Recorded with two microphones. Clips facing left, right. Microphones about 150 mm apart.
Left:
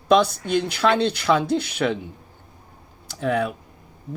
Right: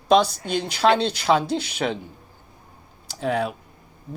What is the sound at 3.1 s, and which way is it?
Speech, 55° left (ahead or behind).